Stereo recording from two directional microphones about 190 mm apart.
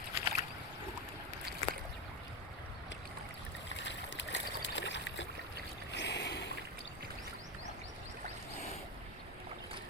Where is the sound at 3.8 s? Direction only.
70° left (ahead or behind).